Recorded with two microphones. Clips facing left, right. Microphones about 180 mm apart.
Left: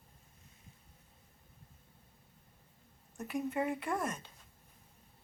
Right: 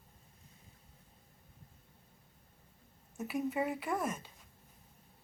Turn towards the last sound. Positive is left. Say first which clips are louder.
# right 1 dB
turn(degrees=-5)  # may be behind; listen again after turning